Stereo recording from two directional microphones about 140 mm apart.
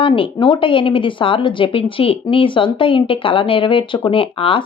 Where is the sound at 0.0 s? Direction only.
35° left (ahead or behind).